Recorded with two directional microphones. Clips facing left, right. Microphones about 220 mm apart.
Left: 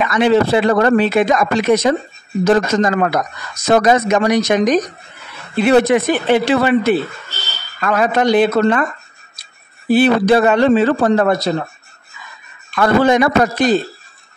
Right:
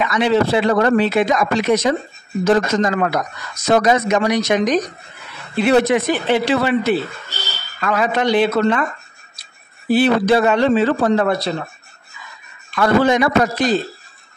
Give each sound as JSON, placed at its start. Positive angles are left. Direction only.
{"t": 0.0, "sound": "speech", "side_deg": 50}
{"t": 9.9, "sound": "speech", "side_deg": 50}
{"t": 12.7, "sound": "speech", "side_deg": 50}